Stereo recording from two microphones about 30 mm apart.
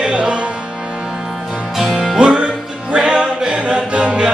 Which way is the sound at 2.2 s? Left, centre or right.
Right.